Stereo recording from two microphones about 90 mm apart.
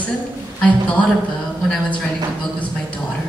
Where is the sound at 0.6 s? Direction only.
10° left (ahead or behind).